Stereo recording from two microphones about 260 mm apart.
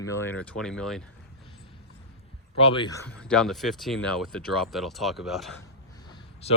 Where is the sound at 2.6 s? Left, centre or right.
Left.